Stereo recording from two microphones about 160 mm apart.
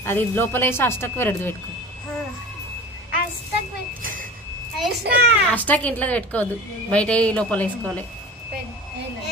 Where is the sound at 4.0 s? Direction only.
60° right (ahead or behind).